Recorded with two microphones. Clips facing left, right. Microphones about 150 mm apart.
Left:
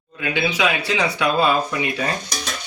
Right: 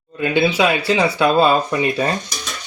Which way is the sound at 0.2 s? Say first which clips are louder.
Right 5 dB; 35° right (ahead or behind).